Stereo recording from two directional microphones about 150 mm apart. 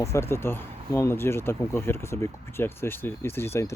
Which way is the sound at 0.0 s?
15° left (ahead or behind).